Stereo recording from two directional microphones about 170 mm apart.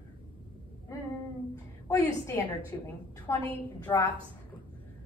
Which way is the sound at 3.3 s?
15° left (ahead or behind).